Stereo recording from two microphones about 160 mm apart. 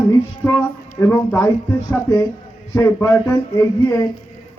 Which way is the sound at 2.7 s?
20° left (ahead or behind).